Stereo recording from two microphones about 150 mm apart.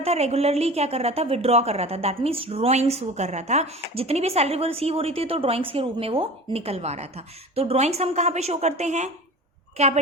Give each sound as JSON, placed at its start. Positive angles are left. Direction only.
{"t": 0.0, "sound": "a woman's voice", "side_deg": -45}